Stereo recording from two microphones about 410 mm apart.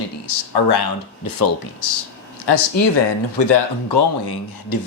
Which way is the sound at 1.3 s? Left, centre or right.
Left.